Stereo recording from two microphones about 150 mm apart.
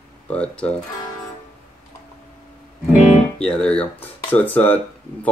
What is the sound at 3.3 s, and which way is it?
Speech, 5° left (ahead or behind).